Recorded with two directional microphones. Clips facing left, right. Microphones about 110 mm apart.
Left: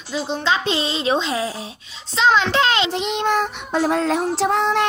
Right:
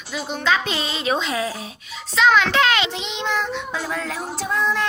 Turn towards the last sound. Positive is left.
turn(degrees=75)  # may be behind; listen again after turning